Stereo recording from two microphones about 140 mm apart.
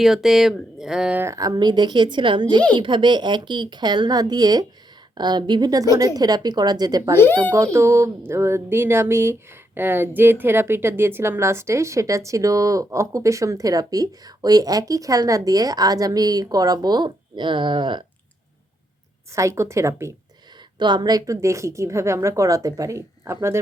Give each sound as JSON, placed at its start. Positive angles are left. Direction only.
{"t": 0.0, "sound": "speech", "side_deg": 0}
{"t": 1.2, "sound": "a woman's voice", "side_deg": -25}
{"t": 19.3, "sound": "speech", "side_deg": -20}
{"t": 20.7, "sound": "speech", "side_deg": -35}